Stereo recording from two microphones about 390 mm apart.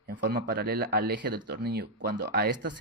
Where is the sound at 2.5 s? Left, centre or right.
Right.